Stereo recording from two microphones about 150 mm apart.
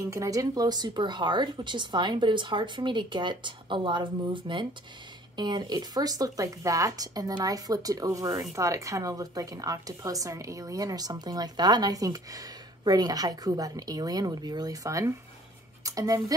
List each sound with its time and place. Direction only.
0.1 s a woman's voice: 20° right (ahead or behind)